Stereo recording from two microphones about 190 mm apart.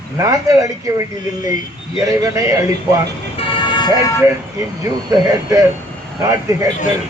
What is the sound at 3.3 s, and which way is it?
Vehicle, 25° left (ahead or behind).